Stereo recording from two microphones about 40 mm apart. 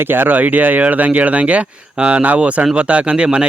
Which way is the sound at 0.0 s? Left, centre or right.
Right.